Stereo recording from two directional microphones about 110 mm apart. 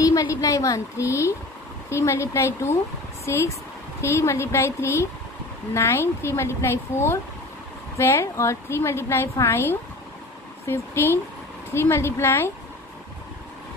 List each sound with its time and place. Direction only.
0.0 s a woman's voice: 30° left (ahead or behind)